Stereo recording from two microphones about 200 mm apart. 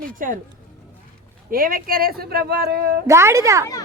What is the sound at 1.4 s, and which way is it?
Speech, 45° right (ahead or behind).